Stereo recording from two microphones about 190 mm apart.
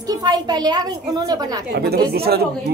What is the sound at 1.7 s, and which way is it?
Speech, 55° right (ahead or behind).